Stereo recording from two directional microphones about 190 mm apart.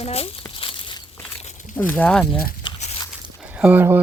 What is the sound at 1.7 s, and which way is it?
Speech, 10° left (ahead or behind).